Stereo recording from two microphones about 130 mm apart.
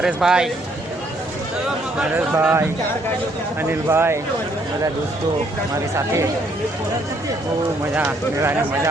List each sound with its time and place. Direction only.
0.0 s a man's voice: 5° right (ahead or behind)
2.0 s speech: 10° right (ahead or behind)
7.9 s speech: 15° right (ahead or behind)